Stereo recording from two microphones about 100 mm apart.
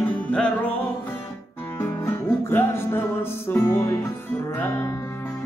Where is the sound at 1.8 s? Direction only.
25° left (ahead or behind).